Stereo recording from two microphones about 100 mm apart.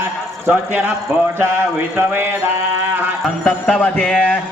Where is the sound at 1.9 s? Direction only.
20° right (ahead or behind).